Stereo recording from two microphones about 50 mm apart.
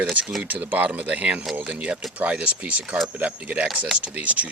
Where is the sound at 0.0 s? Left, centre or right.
Right.